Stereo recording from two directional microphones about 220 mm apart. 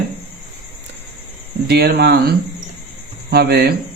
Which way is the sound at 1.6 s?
45° right (ahead or behind).